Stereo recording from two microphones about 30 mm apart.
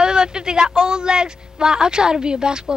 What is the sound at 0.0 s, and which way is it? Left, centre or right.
Speech, right.